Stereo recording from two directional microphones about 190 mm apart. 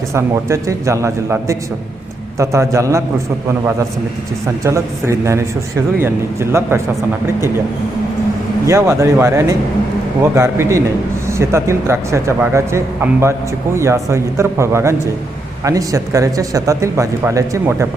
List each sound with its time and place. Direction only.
0.1 s speech: 15° right (ahead or behind)
4.6 s speech: 15° right (ahead or behind)
8.6 s speech: 15° right (ahead or behind)